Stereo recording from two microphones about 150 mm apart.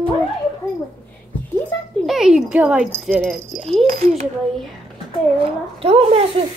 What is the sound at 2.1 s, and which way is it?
Speech, 5° right (ahead or behind).